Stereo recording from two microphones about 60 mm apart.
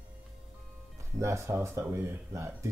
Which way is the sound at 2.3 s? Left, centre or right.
Right.